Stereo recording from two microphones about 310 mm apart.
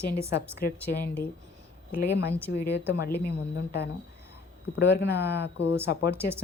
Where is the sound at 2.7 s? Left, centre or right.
Centre.